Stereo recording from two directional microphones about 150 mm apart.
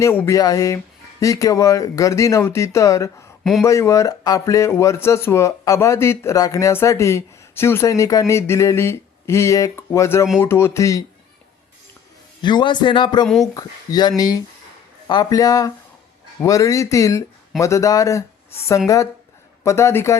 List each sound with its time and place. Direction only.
0.0 s speech: 20° left (ahead or behind)
12.4 s a man's voice: 30° left (ahead or behind)
13.2 s speech: centre (ahead or behind)
13.5 s speech: 25° left (ahead or behind)
19.6 s speech: 20° left (ahead or behind)